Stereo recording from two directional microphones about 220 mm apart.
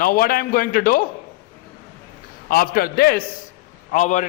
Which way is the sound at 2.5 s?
40° left (ahead or behind).